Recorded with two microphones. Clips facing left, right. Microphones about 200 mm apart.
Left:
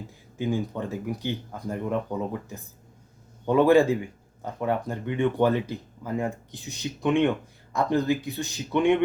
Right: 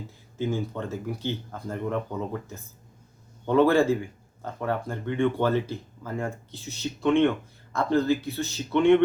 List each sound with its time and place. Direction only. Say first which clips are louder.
0.3 s speech: left 1 dB; 15° left (ahead or behind)
3.4 s speech: left 1 dB; 15° left (ahead or behind)